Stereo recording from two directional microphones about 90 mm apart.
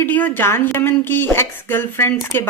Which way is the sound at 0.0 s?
20° left (ahead or behind).